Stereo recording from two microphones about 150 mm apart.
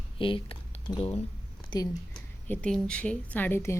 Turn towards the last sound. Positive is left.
turn(degrees=15)  # may be behind; listen again after turning